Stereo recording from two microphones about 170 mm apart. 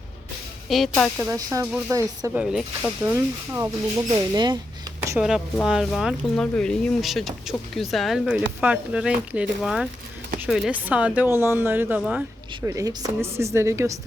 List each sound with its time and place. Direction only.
0.7 s speech: 5° left (ahead or behind)
1.2 s a woman's voice: 15° right (ahead or behind)
2.4 s speech: 5° right (ahead or behind)
3.1 s a woman's voice: 15° right (ahead or behind)
5.1 s a woman's voice: centre (ahead or behind)
12.6 s a woman's voice: 20° right (ahead or behind)